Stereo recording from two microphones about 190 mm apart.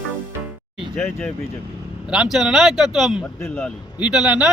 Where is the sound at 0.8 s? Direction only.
Centre (ahead or behind).